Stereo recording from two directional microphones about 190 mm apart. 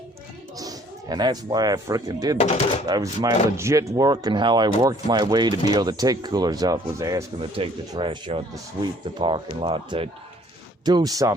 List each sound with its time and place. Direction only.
0.6 s speech: 20° right (ahead or behind)